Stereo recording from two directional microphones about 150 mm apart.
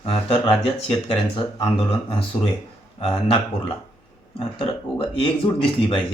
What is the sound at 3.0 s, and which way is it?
Speech, 40° left (ahead or behind).